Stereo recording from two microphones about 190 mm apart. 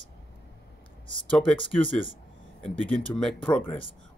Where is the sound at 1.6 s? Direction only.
25° left (ahead or behind).